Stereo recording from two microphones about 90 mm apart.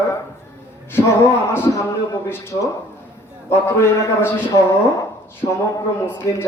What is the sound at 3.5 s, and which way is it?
A man's voice, 30° left (ahead or behind).